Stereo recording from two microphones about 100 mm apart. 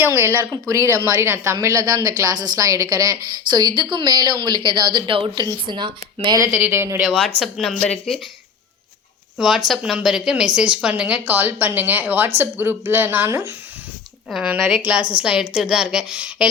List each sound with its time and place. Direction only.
0.0 s a woman's voice: 25° right (ahead or behind); by 5.3 s 60° right (ahead or behind)
5.3 s a woman's voice: 45° right (ahead or behind)
6.5 s a woman's voice: 15° right (ahead or behind)
6.7 s a woman's voice: 25° right (ahead or behind)
7.1 s speech: 5° left (ahead or behind)
9.4 s a woman's voice: 5° right (ahead or behind); by 13.5 s 30° right (ahead or behind)
14.3 s speech: 5° right (ahead or behind)
14.5 s a woman's voice: 15° right (ahead or behind)